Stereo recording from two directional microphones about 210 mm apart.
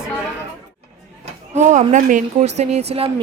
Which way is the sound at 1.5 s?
35° right (ahead or behind).